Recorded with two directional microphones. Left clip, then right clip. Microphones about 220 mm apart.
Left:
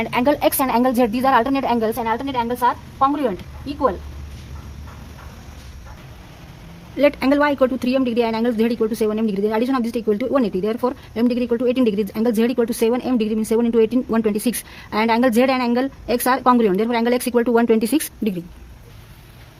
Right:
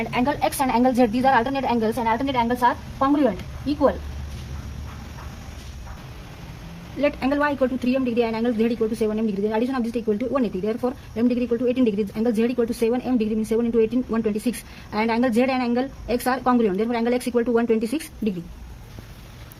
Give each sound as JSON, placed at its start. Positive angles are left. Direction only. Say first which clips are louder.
{"t": 0.0, "sound": "a woman's voice", "louder": "left 5 dB", "side_deg": 45}
{"t": 7.0, "sound": "a woman's voice", "louder": "left 5 dB", "side_deg": 50}